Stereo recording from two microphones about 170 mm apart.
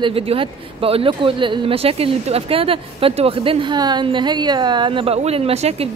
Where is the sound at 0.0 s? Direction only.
35° right (ahead or behind).